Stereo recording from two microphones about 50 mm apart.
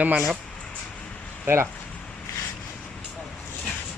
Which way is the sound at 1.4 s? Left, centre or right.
Right.